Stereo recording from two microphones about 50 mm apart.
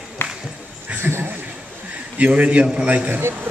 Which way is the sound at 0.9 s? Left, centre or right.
Right.